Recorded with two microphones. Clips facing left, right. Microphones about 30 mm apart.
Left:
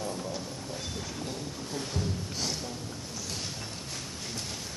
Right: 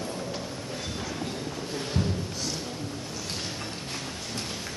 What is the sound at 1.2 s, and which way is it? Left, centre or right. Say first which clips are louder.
Boat: right 4 dB; right.